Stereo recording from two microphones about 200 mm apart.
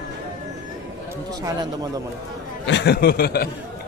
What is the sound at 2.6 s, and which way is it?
Speech, 60° left (ahead or behind).